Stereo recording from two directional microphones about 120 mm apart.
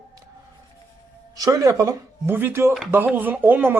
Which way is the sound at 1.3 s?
30° right (ahead or behind).